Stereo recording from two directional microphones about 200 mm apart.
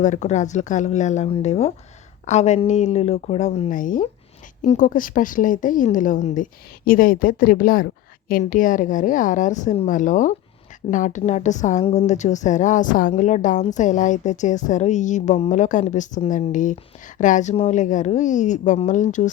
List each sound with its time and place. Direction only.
0.0 s a woman's voice: 35° left (ahead or behind)